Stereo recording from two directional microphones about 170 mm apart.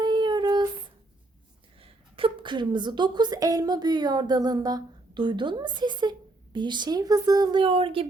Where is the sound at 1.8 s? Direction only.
30° right (ahead or behind).